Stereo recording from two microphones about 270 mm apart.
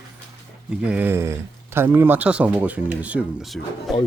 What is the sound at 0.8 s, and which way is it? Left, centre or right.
Speech, centre.